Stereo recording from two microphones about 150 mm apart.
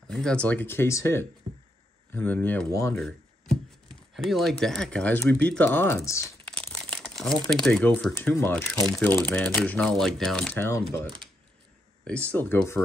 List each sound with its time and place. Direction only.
0.1 s speech: 5° left (ahead or behind)
6.5 s speech: 10° left (ahead or behind)
12.0 s speech: 10° left (ahead or behind)